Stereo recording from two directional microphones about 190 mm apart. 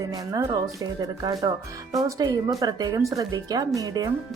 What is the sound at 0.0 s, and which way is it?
Speech, 15° right (ahead or behind).